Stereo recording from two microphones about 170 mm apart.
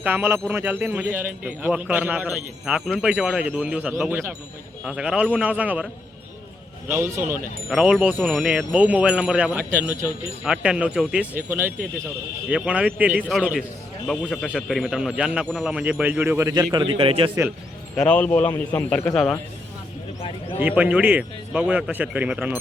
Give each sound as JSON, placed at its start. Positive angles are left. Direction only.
{"t": 0.0, "sound": "a man's voice", "side_deg": -10}
{"t": 16.5, "sound": "a man's voice", "side_deg": -25}
{"t": 17.9, "sound": "a man's voice", "side_deg": 5}
{"t": 20.6, "sound": "a man's voice", "side_deg": -10}